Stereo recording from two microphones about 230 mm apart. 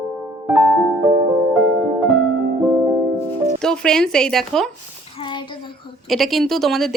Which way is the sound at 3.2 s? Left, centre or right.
Centre.